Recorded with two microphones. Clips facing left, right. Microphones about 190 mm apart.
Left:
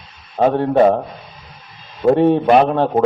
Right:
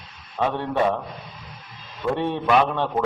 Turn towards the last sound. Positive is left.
turn(degrees=45)  # may be behind; listen again after turning